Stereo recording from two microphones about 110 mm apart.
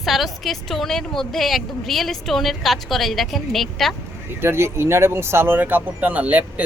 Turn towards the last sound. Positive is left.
turn(degrees=-15)  # may be behind; listen again after turning